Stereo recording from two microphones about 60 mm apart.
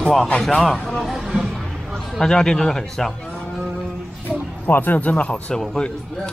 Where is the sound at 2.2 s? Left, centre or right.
Centre.